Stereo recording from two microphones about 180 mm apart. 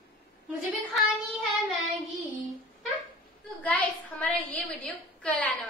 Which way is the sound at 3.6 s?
10° left (ahead or behind).